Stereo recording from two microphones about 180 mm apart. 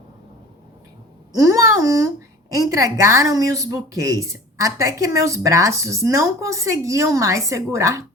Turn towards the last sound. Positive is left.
turn(degrees=-15)  # may be behind; listen again after turning